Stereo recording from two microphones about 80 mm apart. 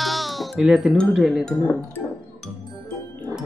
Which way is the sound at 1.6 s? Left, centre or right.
Left.